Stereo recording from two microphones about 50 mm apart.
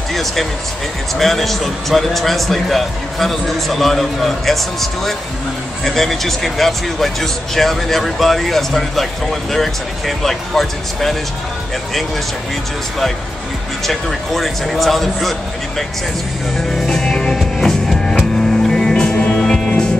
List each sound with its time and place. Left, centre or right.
0.1 s speech: centre
5.9 s speech: centre
13.8 s speech: centre
16.5 s music: centre
19.3 s music: centre